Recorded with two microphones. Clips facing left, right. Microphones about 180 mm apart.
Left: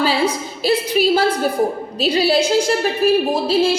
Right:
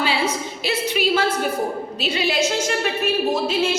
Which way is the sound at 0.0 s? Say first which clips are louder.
Left 4 dB; 35° left (ahead or behind).